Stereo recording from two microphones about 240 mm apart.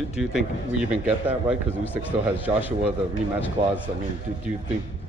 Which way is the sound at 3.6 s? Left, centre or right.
Right.